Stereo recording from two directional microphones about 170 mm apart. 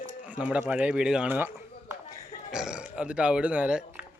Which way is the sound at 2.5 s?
5° right (ahead or behind).